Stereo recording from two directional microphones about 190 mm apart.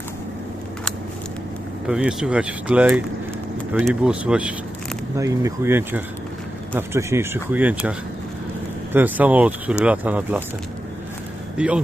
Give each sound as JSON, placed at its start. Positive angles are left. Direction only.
{"t": 1.9, "sound": "speech", "side_deg": -5}
{"t": 11.5, "sound": "speech", "side_deg": -5}